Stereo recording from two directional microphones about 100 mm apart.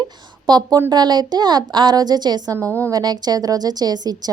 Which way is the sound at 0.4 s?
45° right (ahead or behind).